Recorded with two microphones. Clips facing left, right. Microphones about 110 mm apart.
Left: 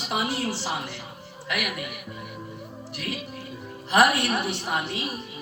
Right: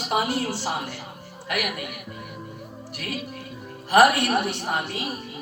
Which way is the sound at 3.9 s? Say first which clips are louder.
Right 3 dB; 50° right (ahead or behind).